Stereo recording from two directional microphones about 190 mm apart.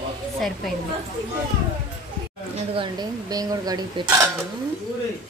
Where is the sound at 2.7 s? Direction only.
25° right (ahead or behind).